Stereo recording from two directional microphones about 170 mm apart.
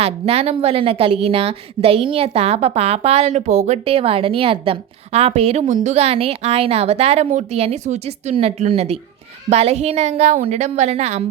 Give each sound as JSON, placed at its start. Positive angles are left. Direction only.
{"t": 0.0, "sound": "a woman's voice", "side_deg": -35}